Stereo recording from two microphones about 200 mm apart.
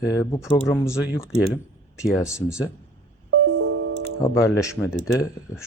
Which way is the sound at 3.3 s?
70° right (ahead or behind).